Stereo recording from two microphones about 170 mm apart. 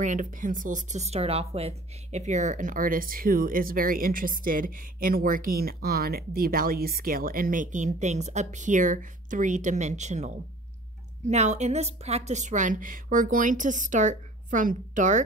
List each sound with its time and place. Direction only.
0.0 s speech: 50° right (ahead or behind)